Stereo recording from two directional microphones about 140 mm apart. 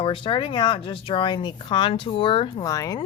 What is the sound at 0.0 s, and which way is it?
Speech, 35° left (ahead or behind).